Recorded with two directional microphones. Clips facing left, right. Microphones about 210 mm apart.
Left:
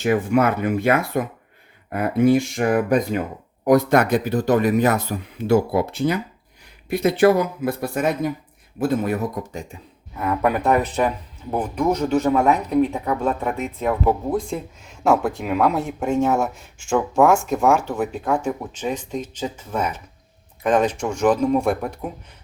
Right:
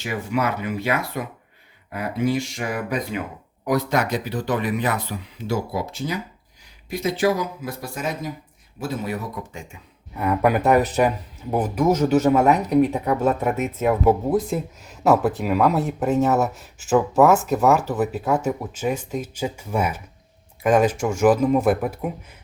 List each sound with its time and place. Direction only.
0.0 s speech: 50° left (ahead or behind)
10.2 s speech: centre (ahead or behind)